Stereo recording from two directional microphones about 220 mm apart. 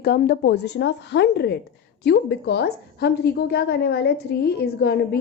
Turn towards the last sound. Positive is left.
turn(degrees=45)  # may be behind; listen again after turning